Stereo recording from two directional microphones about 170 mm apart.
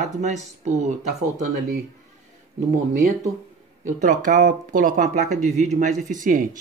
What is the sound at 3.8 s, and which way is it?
Speech, 50° right (ahead or behind).